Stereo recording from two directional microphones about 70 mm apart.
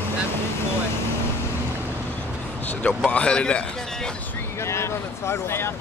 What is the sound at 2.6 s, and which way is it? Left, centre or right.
Speech, left.